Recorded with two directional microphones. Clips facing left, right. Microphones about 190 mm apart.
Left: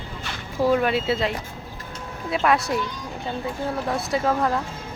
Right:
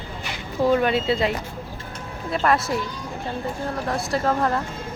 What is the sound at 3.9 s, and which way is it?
Speech, centre (ahead or behind).